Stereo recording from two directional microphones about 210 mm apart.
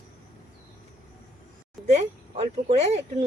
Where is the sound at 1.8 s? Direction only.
30° right (ahead or behind).